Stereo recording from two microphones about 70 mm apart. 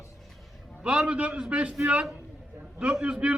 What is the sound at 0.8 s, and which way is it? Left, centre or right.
A man's voice, centre.